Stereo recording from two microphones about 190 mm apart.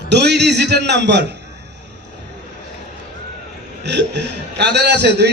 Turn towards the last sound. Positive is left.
turn(degrees=-60)  # may be behind; listen again after turning